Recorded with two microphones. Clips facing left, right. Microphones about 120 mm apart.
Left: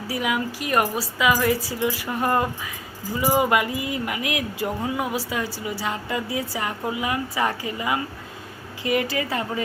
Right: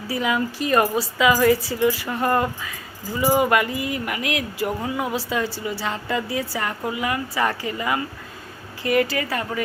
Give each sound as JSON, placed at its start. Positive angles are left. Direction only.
{"t": 0.1, "sound": "a woman's voice", "side_deg": 10}
{"t": 1.9, "sound": "a woman's voice", "side_deg": 15}